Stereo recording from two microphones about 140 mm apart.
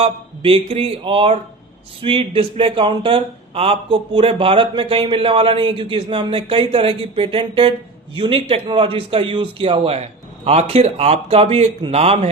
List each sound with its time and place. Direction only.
0.0 s a man's voice: 45° right (ahead or behind)